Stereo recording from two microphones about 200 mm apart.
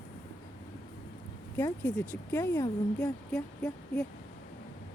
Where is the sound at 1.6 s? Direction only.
10° left (ahead or behind).